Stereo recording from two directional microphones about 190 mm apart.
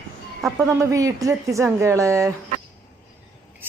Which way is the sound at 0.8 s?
15° right (ahead or behind).